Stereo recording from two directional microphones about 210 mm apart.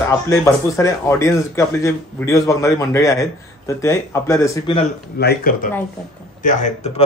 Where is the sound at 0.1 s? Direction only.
15° left (ahead or behind).